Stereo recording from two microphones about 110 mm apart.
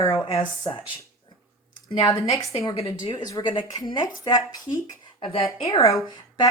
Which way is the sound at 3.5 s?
45° left (ahead or behind).